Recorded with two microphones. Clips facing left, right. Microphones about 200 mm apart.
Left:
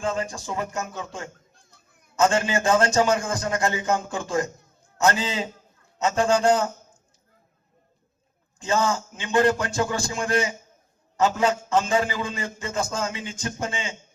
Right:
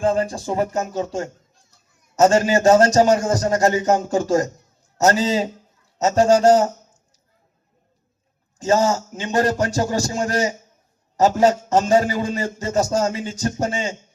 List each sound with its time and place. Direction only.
0.0 s a man's voice: 35° right (ahead or behind)
8.5 s a man's voice: 40° right (ahead or behind)